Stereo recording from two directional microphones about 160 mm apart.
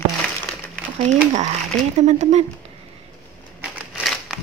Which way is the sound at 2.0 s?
45° right (ahead or behind).